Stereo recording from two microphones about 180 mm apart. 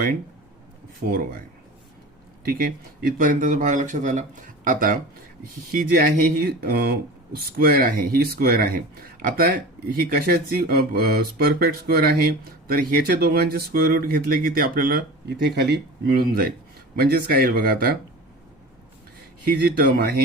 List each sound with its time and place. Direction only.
0.9 s speech: 55° right (ahead or behind)
19.5 s speech: 55° right (ahead or behind)